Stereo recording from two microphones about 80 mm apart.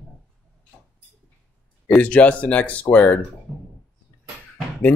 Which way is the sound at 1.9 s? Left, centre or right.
Centre.